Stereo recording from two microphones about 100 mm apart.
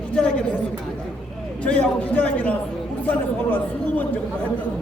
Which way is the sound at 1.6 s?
10° left (ahead or behind).